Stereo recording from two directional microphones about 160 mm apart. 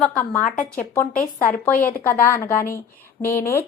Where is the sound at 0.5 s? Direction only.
55° left (ahead or behind).